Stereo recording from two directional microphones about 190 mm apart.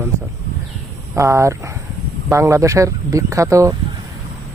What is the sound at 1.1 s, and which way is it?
Speech, 15° right (ahead or behind).